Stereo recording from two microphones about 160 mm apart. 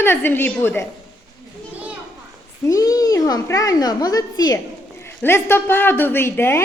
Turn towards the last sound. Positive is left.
turn(degrees=15)  # may be behind; listen again after turning